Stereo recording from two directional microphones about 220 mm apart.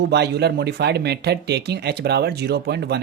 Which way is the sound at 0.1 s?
50° right (ahead or behind).